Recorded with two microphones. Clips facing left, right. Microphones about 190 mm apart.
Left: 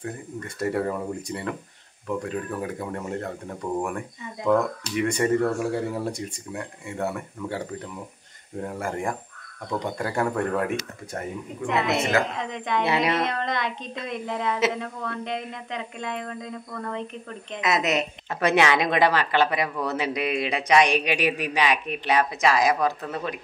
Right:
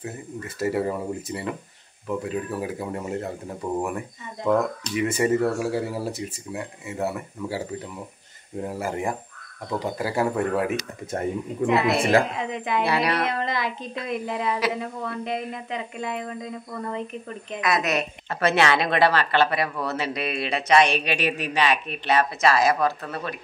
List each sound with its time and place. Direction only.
0.0 s speech: 5° right (ahead or behind)
5.0 s speech: 5° right (ahead or behind)
12.0 s a woman's voice: 30° right (ahead or behind)
12.4 s speech: 5° right (ahead or behind)
12.8 s speech: 20° left (ahead or behind)
13.2 s speech: 5° right (ahead or behind)
17.6 s a woman's voice: 20° left (ahead or behind)